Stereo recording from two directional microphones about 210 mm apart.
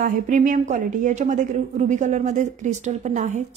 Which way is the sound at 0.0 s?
35° right (ahead or behind).